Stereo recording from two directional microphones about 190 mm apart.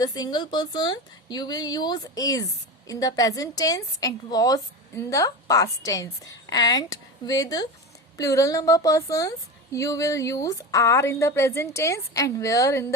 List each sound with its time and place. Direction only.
0.0 s a woman's voice: 20° left (ahead or behind)